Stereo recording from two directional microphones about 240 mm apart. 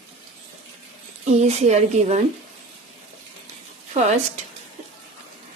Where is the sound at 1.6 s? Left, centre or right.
Right.